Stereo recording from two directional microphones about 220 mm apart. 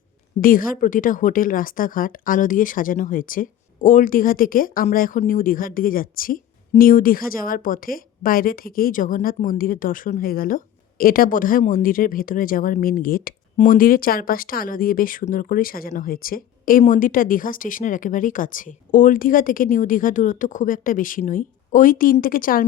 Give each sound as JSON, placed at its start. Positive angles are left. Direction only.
{"t": 0.4, "sound": "a woman's voice", "side_deg": 40}